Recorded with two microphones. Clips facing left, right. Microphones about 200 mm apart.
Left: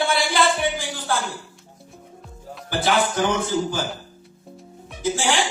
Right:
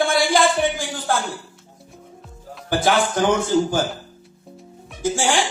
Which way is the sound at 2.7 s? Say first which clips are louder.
Right 2 dB; 45° right (ahead or behind).